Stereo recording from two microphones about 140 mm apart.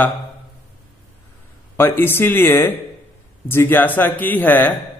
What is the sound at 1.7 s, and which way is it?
A man's voice, 15° left (ahead or behind).